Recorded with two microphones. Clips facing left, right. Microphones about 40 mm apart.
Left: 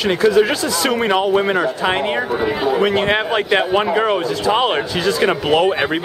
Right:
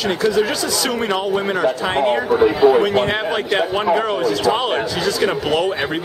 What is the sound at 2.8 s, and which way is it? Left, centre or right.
Speech, centre.